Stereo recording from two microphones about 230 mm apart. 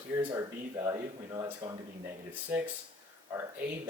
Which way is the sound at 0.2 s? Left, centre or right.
Centre.